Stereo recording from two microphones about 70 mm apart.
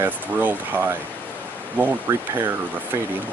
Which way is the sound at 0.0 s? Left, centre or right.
Right.